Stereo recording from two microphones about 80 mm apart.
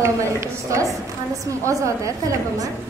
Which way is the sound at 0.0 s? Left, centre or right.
Right.